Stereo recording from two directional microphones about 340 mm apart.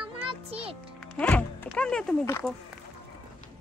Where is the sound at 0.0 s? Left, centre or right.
Centre.